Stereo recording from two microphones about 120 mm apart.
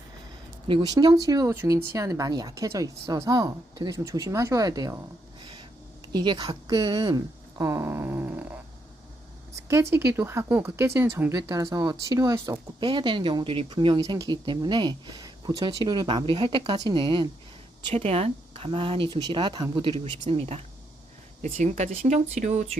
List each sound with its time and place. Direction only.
0.7 s speech: 35° right (ahead or behind)
6.1 s speech: 40° right (ahead or behind)
7.6 s speech: 20° right (ahead or behind)
9.6 s speech: 25° right (ahead or behind)
12.9 s speech: 45° right (ahead or behind)
17.9 s speech: 60° right (ahead or behind); by 20.1 s 40° right (ahead or behind)
21.4 s speech: 75° right (ahead or behind)